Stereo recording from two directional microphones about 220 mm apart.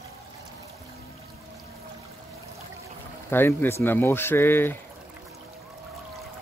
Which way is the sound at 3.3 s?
10° left (ahead or behind).